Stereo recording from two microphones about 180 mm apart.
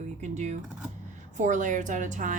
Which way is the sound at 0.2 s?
40° right (ahead or behind).